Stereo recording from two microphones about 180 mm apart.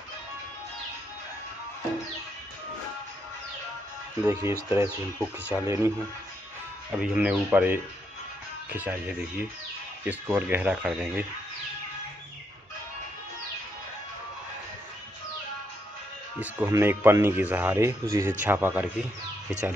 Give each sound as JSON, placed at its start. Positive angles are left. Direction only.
{"t": 4.3, "sound": "speech", "side_deg": -15}
{"t": 16.3, "sound": "speech", "side_deg": -10}